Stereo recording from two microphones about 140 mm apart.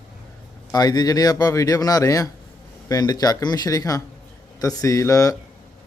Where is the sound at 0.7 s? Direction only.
30° left (ahead or behind).